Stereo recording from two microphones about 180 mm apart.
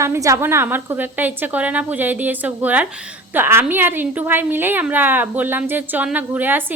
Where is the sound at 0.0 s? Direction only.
15° right (ahead or behind).